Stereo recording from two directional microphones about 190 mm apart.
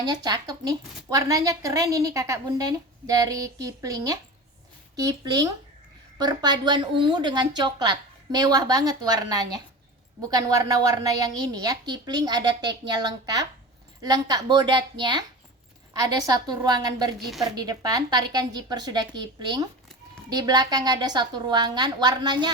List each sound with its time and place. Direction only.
0.0 s a woman's voice: 20° right (ahead or behind)